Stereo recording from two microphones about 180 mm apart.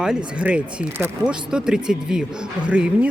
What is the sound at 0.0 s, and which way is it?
Speech, 5° right (ahead or behind).